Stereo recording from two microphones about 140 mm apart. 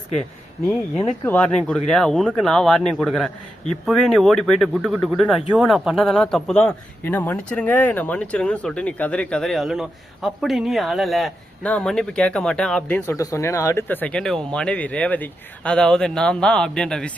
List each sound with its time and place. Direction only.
1.2 s a man's voice: 10° left (ahead or behind)
13.0 s speech: 20° left (ahead or behind)
13.8 s speech: 10° left (ahead or behind)